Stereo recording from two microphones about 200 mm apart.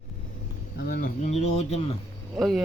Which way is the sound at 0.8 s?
45° left (ahead or behind).